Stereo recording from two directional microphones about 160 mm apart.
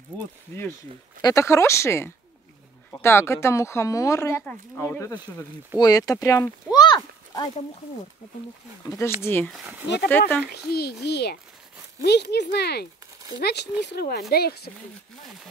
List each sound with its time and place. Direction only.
1.2 s speech: 20° left (ahead or behind)
9.2 s speech: 15° left (ahead or behind)
9.5 s speech: 10° right (ahead or behind)
10.0 s speech: 10° left (ahead or behind)
10.7 s a child's voice: 75° left (ahead or behind)